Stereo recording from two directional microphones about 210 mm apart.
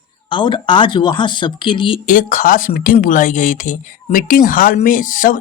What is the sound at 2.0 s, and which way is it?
Speech, 35° left (ahead or behind).